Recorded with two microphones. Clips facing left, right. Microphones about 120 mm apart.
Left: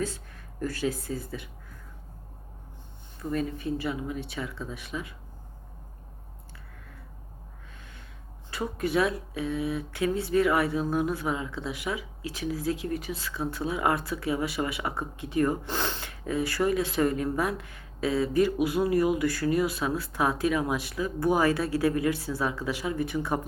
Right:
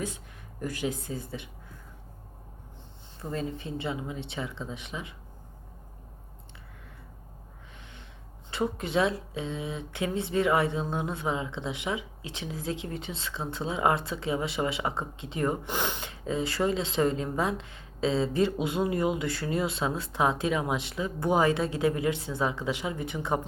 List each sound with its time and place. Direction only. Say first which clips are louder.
0.6 s speech: left 2 dB; 20° right (ahead or behind)
3.2 s speech: left 3 dB; 25° right (ahead or behind)
8.4 s speech: even; 25° right (ahead or behind)